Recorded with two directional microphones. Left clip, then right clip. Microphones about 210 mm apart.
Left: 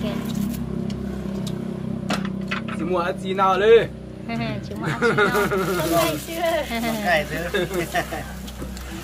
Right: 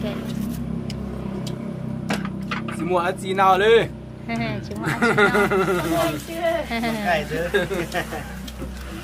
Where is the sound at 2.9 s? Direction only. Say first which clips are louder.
Right 2 dB; 50° right (ahead or behind).